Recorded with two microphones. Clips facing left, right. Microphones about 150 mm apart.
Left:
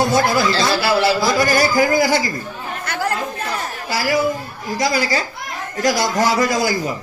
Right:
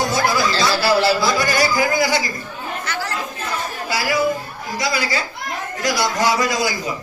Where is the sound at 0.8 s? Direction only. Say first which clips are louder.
Right 2 dB; 20° left (ahead or behind).